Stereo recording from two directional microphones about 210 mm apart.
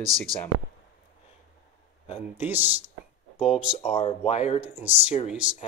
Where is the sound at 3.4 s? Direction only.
5° right (ahead or behind).